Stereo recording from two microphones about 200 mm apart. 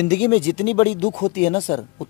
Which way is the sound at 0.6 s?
30° left (ahead or behind).